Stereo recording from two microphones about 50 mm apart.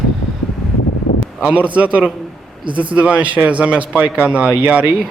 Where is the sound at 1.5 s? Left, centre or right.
Right.